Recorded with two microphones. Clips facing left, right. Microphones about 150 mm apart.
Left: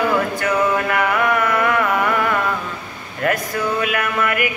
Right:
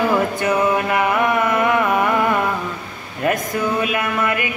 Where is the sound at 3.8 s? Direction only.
20° right (ahead or behind).